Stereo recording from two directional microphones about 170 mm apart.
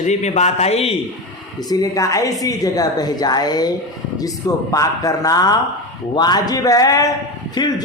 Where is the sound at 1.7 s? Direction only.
20° left (ahead or behind).